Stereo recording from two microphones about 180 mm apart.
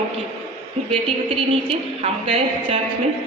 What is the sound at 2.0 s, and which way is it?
Speech, 35° right (ahead or behind).